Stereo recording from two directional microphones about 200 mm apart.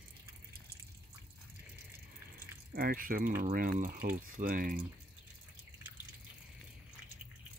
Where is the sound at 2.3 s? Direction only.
45° right (ahead or behind).